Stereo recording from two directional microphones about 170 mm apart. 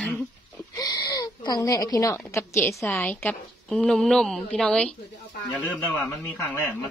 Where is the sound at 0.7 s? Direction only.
20° left (ahead or behind); by 4.9 s 5° left (ahead or behind).